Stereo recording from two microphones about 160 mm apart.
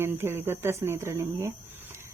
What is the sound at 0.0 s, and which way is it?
Speech, 15° right (ahead or behind).